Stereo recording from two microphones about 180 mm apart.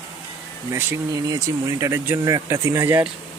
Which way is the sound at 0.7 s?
15° right (ahead or behind).